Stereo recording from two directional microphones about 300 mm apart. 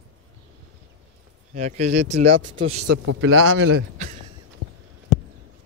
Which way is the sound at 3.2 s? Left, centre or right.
Right.